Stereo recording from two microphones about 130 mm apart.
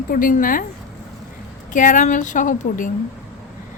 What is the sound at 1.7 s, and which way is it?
Speech, 80° left.